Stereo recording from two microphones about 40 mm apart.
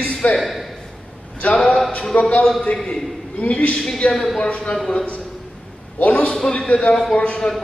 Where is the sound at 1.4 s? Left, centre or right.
Left.